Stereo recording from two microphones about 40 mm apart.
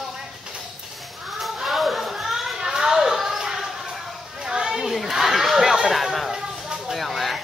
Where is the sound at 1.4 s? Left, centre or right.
Centre.